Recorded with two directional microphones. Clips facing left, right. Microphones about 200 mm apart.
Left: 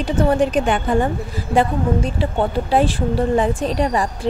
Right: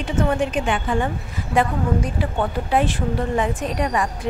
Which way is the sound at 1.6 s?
30° left (ahead or behind).